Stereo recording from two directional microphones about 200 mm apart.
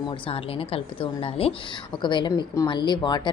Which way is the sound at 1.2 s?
30° left (ahead or behind).